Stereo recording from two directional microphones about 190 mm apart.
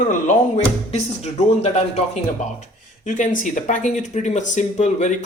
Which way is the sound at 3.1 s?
40° left (ahead or behind).